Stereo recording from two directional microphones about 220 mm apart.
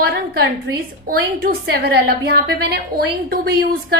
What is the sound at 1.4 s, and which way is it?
A woman's voice, 45° right (ahead or behind).